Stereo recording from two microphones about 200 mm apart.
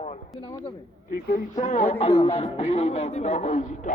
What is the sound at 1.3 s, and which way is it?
Speech, 40° left (ahead or behind).